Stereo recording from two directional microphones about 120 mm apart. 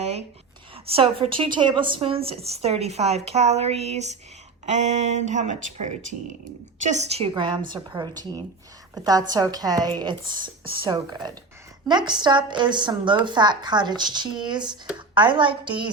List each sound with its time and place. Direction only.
0.0 s a sound: 60° right (ahead or behind)
0.9 s a woman's voice: 50° right (ahead or behind)
7.3 s a woman's voice: 40° right (ahead or behind)
9.3 s a woman's voice: 30° right (ahead or behind)